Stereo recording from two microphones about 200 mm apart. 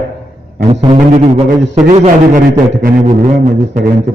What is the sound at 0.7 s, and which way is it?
A man's voice, 30° right (ahead or behind).